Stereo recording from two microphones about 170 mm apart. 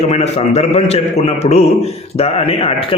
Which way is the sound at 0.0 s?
40° left (ahead or behind).